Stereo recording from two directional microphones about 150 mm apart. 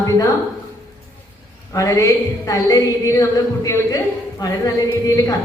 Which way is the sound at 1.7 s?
20° left (ahead or behind).